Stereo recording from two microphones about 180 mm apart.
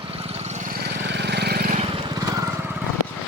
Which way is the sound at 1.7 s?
40° right (ahead or behind).